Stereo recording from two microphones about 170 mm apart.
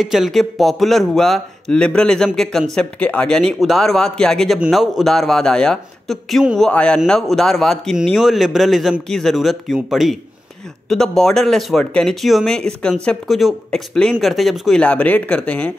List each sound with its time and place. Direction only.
0.0 s speech: centre (ahead or behind)